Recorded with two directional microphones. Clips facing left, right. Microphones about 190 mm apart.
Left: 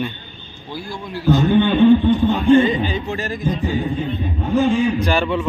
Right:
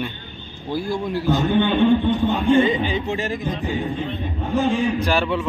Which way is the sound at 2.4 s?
20° right (ahead or behind).